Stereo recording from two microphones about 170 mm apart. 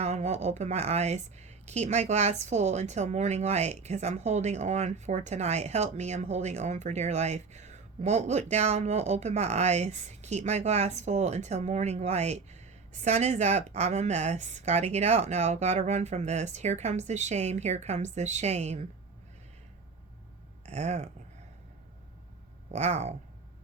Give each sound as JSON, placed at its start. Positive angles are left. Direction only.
{"t": 0.0, "sound": "speech", "side_deg": -40}
{"t": 20.7, "sound": "speech", "side_deg": -40}
{"t": 22.7, "sound": "speech", "side_deg": -40}